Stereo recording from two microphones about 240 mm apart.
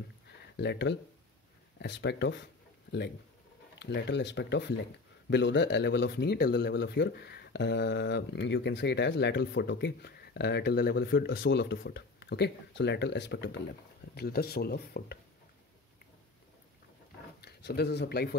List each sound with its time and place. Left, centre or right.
0.6 s speech: left
3.8 s speech: left
17.4 s speech: left